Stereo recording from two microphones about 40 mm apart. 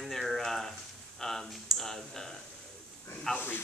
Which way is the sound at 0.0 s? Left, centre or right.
Centre.